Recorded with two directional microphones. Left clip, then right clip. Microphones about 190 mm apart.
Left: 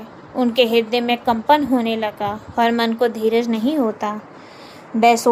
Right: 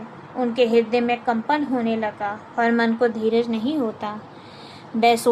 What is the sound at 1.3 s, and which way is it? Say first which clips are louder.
A woman's voice: left 6 dB; 45° left (ahead or behind).